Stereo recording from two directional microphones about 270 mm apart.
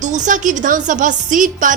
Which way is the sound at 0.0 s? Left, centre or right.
Right.